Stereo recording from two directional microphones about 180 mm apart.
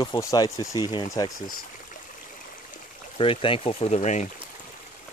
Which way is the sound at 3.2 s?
30° left (ahead or behind).